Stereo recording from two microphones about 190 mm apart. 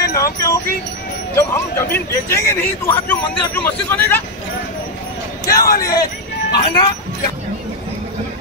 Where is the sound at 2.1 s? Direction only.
15° left (ahead or behind).